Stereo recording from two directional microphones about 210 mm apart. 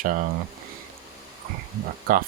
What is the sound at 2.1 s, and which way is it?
Speech, 40° right (ahead or behind).